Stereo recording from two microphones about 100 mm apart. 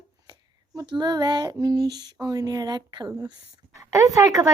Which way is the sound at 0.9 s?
45° right (ahead or behind).